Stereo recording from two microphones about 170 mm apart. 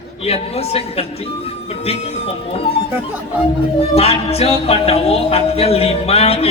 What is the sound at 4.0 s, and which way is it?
Music, 35° left (ahead or behind).